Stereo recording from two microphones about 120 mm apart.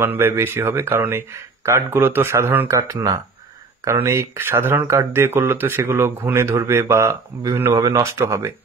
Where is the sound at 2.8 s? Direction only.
30° right (ahead or behind).